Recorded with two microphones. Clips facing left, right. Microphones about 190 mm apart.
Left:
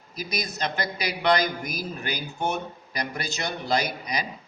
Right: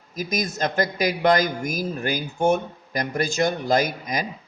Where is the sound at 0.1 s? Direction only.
45° right (ahead or behind).